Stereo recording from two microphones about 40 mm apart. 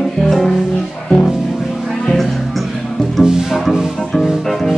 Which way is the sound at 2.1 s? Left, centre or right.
Centre.